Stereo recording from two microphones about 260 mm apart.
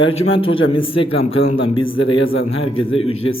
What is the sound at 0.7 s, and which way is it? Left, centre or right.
A man's voice, centre.